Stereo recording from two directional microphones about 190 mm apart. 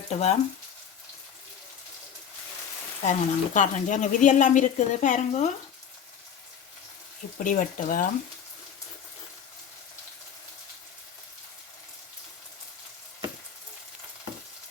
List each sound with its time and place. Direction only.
0.1 s speech: 35° left (ahead or behind)
3.0 s speech: 40° left (ahead or behind)
7.3 s speech: 45° left (ahead or behind)